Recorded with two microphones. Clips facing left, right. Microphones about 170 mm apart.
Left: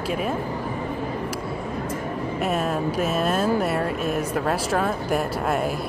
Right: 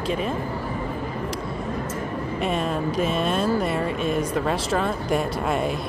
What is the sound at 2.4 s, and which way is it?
Speech, 5° left (ahead or behind).